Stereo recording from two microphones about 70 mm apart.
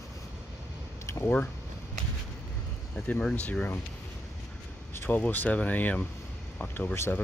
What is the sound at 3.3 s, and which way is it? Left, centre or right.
Speech, centre.